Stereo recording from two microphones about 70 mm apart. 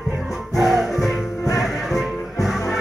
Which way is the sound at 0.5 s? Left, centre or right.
Centre.